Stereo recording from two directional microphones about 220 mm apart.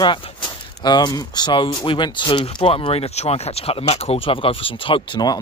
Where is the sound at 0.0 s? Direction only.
20° left (ahead or behind).